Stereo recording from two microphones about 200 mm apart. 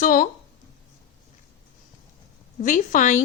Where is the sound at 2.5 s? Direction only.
40° left (ahead or behind).